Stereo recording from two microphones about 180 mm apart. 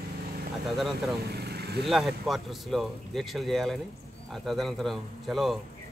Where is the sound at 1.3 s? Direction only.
65° right (ahead or behind).